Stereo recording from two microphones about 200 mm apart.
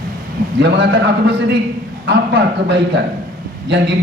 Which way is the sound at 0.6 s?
60° right (ahead or behind).